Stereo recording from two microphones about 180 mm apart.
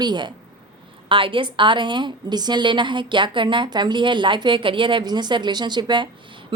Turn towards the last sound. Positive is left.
turn(degrees=-25)  # may be behind; listen again after turning